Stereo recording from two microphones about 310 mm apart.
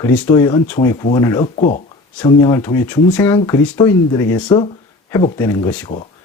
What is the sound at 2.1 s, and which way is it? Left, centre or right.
Speech, centre.